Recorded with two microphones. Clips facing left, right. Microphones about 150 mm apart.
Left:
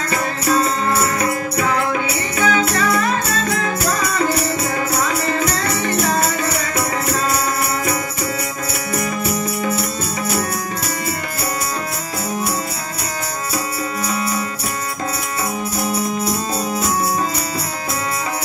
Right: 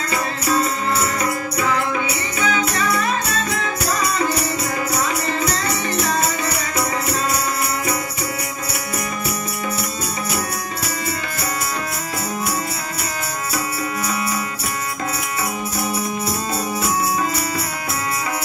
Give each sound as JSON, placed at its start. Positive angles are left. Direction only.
{"t": 0.1, "sound": "music", "side_deg": 50}